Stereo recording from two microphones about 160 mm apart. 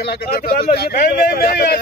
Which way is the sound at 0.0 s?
80° left.